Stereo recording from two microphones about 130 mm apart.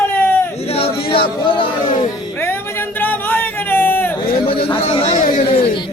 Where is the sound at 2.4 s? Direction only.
20° left (ahead or behind).